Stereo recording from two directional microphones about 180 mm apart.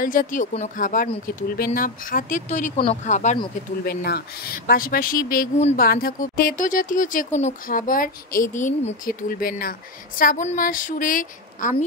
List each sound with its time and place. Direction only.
0.0 s speech: 50° left (ahead or behind)
3.8 s a woman's voice: 60° left (ahead or behind)